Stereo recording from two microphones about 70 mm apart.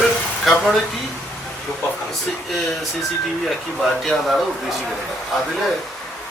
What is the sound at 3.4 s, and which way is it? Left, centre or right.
Speech, centre.